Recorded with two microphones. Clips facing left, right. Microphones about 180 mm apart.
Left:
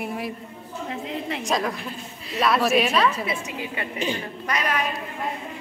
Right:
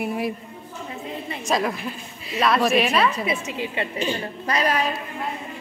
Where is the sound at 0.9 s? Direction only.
75° left (ahead or behind).